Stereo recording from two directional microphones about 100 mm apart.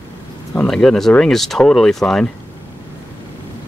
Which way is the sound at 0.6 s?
5° left (ahead or behind).